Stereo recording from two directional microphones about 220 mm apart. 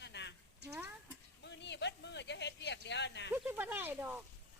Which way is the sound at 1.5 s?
50° left (ahead or behind).